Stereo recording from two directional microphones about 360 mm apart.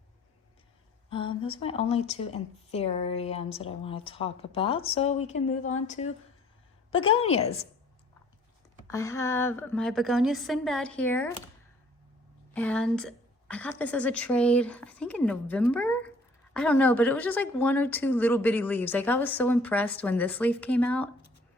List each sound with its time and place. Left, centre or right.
1.1 s speech: centre
8.9 s a woman's voice: centre
12.5 s a woman's voice: centre